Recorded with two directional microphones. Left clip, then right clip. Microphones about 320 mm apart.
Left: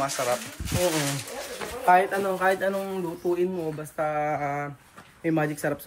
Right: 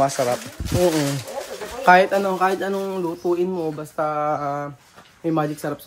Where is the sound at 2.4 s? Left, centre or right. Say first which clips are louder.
Right 3 dB; centre.